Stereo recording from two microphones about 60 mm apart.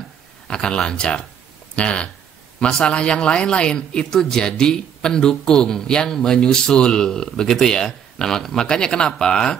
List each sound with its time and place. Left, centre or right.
0.5 s speech: centre